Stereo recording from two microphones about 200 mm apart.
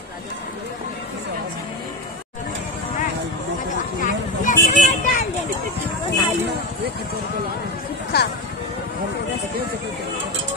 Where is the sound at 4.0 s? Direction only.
40° left (ahead or behind).